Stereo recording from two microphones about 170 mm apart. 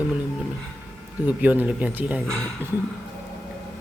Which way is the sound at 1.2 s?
10° right (ahead or behind).